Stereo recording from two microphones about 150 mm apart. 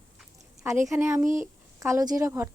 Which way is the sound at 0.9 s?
20° right (ahead or behind).